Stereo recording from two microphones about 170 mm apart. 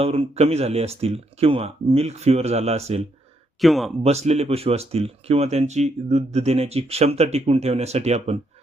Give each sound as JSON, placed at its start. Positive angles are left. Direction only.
{"t": 0.0, "sound": "speech", "side_deg": -35}
{"t": 3.6, "sound": "speech", "side_deg": 0}
{"t": 4.0, "sound": "speech", "side_deg": -40}